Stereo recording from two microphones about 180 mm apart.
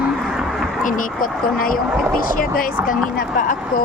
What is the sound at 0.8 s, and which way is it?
Speech, 50° left (ahead or behind).